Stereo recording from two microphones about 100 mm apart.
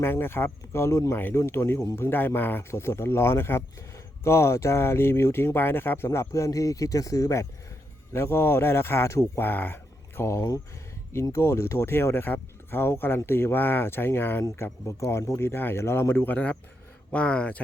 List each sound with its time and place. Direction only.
0.0 s speech: 20° left (ahead or behind)